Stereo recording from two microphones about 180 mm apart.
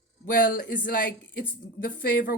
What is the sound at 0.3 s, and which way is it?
A woman's voice, 50° left (ahead or behind).